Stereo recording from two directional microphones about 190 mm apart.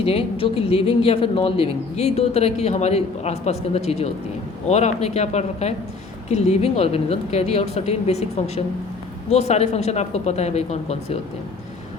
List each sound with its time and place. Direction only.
0.0 s speech: 30° left (ahead or behind)